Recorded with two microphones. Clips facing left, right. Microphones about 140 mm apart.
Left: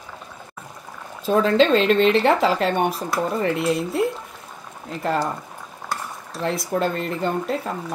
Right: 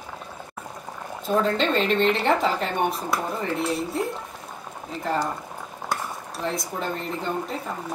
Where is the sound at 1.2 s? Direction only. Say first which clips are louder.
Left 5 dB; 90° left.